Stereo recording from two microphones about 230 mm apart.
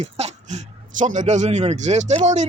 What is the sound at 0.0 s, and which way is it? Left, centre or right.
Speech, right.